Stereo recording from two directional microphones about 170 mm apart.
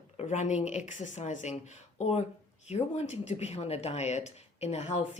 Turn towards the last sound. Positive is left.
turn(degrees=40)  # may be behind; listen again after turning